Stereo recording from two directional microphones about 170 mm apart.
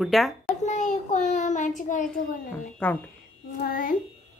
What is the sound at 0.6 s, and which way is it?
Child singing, 45° left (ahead or behind).